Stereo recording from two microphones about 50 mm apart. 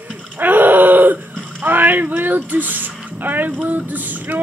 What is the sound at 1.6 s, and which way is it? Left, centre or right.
Female singing, right.